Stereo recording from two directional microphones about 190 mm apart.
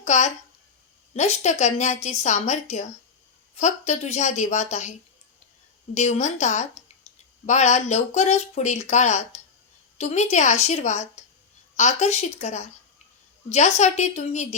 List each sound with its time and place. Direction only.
0.0 s speech: 35° left (ahead or behind)